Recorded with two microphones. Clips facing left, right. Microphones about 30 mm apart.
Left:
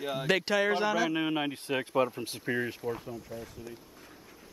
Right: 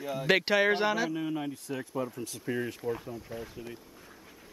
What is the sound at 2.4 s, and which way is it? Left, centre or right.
Speech, centre.